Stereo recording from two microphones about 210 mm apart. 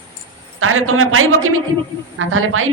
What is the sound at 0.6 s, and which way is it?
A woman's voice, 80° right.